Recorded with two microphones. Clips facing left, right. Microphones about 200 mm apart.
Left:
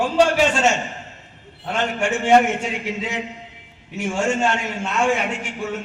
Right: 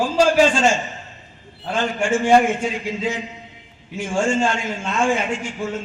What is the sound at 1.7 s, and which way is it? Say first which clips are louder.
A man's voice: right 2 dB; 65° left (ahead or behind).